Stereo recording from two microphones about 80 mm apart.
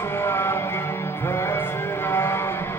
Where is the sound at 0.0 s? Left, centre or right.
Left.